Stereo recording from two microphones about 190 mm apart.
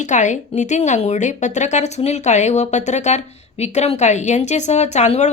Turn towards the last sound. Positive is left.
turn(degrees=35)  # may be behind; listen again after turning